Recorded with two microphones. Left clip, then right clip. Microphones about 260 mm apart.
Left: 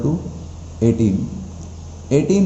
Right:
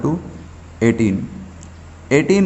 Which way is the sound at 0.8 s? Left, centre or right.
Right.